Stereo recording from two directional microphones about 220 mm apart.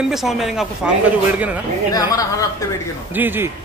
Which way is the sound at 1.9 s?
15° left (ahead or behind).